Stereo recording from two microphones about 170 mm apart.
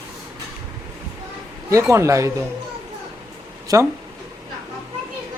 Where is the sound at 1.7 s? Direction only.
15° right (ahead or behind).